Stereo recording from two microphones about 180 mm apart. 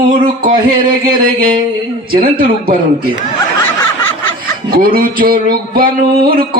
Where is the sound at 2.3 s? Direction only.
55° right (ahead or behind).